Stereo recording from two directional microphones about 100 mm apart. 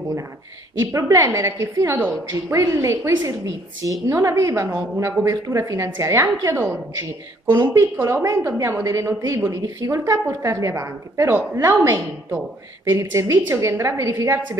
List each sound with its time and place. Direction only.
0.7 s a woman's voice: 30° right (ahead or behind)
4.6 s a woman's voice: 20° right (ahead or behind)
13.1 s a woman's voice: 25° right (ahead or behind)